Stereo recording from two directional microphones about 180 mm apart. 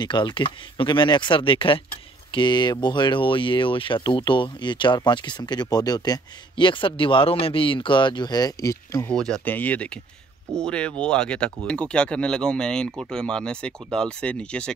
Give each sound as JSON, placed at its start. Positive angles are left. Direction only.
{"t": 0.0, "sound": "speech", "side_deg": 25}
{"t": 9.1, "sound": "speech", "side_deg": 5}